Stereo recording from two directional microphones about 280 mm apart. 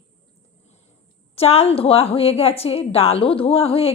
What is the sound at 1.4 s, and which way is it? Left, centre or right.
A woman's voice, left.